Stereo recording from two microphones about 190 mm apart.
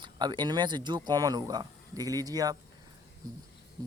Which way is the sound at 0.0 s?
25° right (ahead or behind).